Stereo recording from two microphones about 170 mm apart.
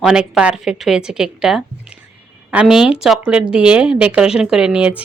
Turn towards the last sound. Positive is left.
turn(degrees=-5)  # may be behind; listen again after turning